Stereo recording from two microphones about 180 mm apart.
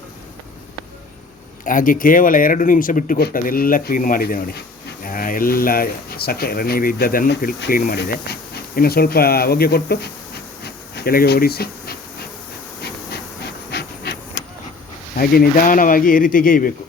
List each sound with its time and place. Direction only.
1.6 s speech: 50° left (ahead or behind)
10.6 s bee: 60° left (ahead or behind)
12.8 s a sound: 65° left (ahead or behind)
15.1 s speech: 55° left (ahead or behind)